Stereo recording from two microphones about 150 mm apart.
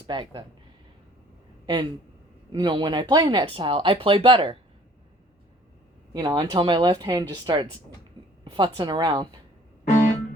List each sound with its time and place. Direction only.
0.1 s speech: 35° right (ahead or behind)
1.6 s speech: 30° right (ahead or behind)
6.1 s speech: 25° right (ahead or behind)